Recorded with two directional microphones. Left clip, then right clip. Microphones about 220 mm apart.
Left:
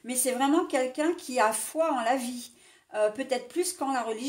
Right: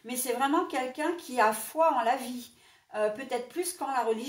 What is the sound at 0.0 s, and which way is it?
A woman's voice, 45° left (ahead or behind).